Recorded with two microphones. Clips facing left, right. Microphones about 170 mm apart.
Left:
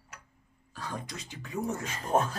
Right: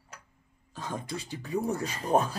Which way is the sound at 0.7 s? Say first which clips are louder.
Right 3 dB; 20° right (ahead or behind).